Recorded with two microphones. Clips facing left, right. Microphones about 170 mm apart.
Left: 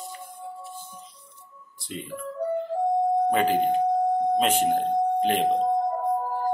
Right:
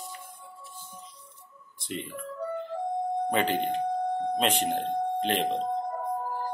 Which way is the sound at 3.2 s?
5° left (ahead or behind).